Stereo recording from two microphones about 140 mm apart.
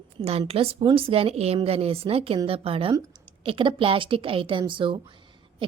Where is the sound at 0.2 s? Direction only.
45° right (ahead or behind).